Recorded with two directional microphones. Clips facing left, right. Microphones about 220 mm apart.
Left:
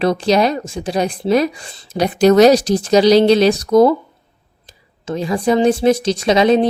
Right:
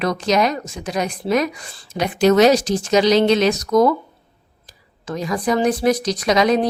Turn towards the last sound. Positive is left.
turn(degrees=25)  # may be behind; listen again after turning